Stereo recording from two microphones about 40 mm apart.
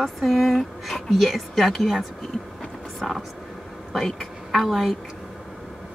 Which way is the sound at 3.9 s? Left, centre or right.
Centre.